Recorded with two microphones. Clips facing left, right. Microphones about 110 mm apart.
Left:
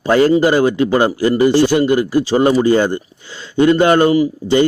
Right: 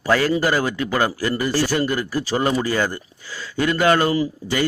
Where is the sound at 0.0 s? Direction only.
25° left (ahead or behind).